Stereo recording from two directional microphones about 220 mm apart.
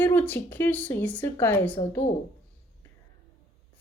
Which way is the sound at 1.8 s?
25° left (ahead or behind).